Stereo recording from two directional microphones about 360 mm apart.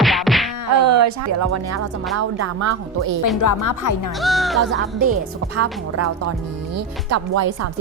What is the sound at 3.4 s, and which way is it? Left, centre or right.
Speech, left.